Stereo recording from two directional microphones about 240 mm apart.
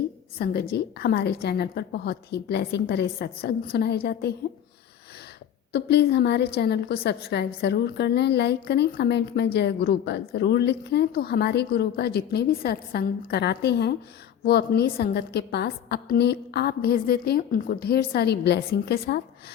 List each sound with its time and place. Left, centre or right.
0.3 s a woman's voice: left
5.7 s a woman's voice: left